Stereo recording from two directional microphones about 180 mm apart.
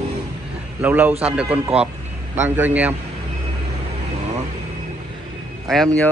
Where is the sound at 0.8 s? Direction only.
10° right (ahead or behind).